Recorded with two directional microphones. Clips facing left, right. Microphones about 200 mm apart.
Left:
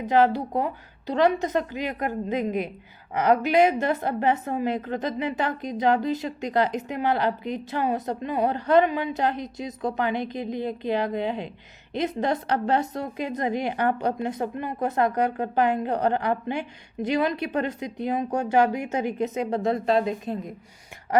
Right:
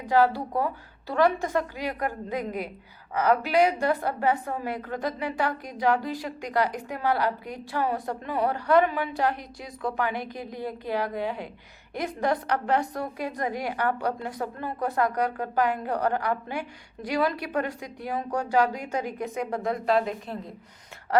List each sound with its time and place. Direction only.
0.1 s a woman's voice: 20° left (ahead or behind)